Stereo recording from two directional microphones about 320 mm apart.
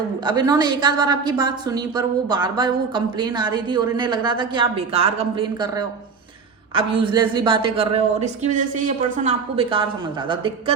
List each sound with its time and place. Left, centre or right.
0.3 s a woman's voice: centre